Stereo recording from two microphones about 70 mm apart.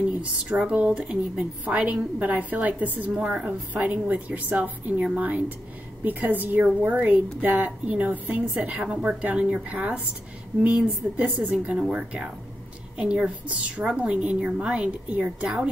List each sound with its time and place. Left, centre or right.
0.2 s a woman's voice: centre